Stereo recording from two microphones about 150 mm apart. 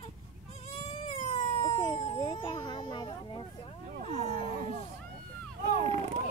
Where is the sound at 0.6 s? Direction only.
45° left (ahead or behind).